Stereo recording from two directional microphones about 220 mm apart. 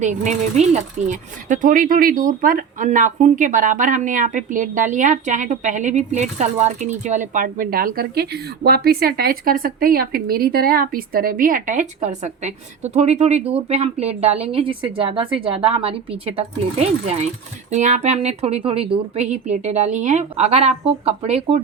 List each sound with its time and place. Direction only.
0.0 s speech: 35° right (ahead or behind)